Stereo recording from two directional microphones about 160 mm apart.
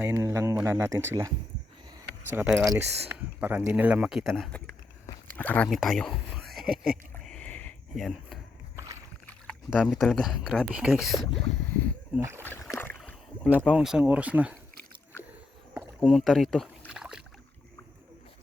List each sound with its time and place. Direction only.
0.0 s speech: 20° right (ahead or behind)
2.3 s speech: 15° right (ahead or behind); by 5.6 s 10° left (ahead or behind)
5.7 s a sound: centre (ahead or behind)
7.9 s speech: centre (ahead or behind)
8.7 s a sound: 20° right (ahead or behind)
9.5 s speech: centre (ahead or behind)
12.2 s speech: 15° right (ahead or behind)
12.7 s rowboat: 15° left (ahead or behind)
13.7 s speech: 5° right (ahead or behind)
16.0 s rowboat: centre (ahead or behind)